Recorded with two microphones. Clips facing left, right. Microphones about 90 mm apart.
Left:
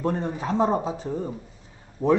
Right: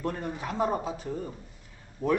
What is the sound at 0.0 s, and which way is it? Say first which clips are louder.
Speech: left 6 dB; 25° left (ahead or behind).